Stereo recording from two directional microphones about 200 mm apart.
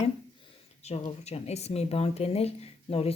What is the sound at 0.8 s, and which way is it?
Speech, 35° left (ahead or behind).